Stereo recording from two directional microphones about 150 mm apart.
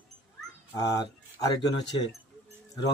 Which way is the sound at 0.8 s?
25° left (ahead or behind).